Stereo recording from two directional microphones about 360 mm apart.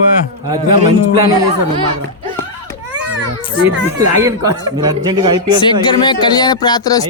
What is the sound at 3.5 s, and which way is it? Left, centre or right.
Speech, centre.